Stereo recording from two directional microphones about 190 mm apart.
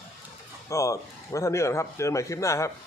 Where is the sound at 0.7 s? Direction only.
15° left (ahead or behind).